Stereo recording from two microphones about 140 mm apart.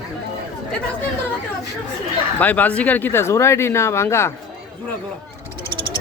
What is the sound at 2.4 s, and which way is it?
Speech, 10° left (ahead or behind).